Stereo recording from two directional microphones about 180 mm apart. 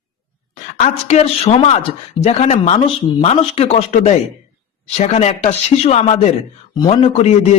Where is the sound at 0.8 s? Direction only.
35° left (ahead or behind).